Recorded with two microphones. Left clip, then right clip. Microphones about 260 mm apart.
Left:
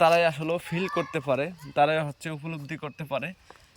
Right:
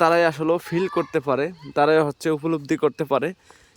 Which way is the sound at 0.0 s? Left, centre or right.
Centre.